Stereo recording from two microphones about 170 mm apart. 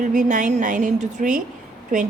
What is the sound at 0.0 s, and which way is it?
Speech, 45° right (ahead or behind).